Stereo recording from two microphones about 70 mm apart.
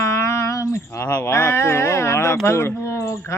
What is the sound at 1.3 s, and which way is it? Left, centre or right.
A man's voice, left.